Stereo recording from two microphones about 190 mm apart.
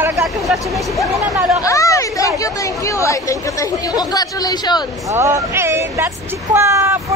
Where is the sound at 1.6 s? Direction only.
15° left (ahead or behind).